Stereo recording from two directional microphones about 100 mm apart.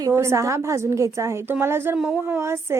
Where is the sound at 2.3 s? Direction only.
25° right (ahead or behind).